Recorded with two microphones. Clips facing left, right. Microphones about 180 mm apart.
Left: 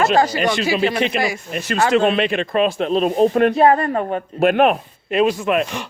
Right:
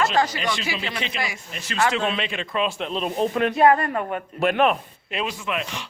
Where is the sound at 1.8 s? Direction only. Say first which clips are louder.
Left 6 dB; 40° left (ahead or behind).